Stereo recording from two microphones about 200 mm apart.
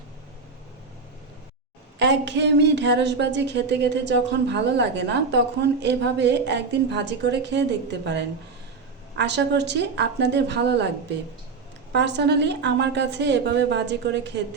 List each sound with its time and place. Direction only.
2.0 s a woman's voice: 60° right (ahead or behind)
11.9 s a woman's voice: 60° right (ahead or behind)